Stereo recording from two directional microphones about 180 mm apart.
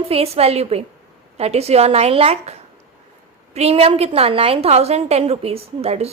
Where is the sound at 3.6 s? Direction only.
35° right (ahead or behind).